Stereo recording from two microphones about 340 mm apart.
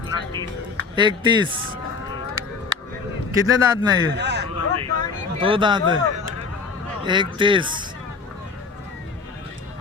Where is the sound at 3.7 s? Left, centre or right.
Centre.